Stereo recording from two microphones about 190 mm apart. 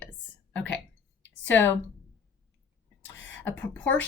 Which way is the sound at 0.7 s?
70° left (ahead or behind).